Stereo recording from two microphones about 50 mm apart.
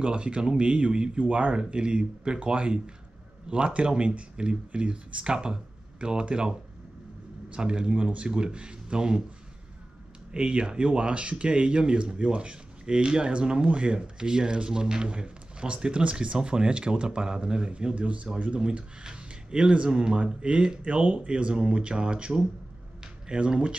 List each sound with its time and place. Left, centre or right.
0.0 s speech: right
10.3 s speech: centre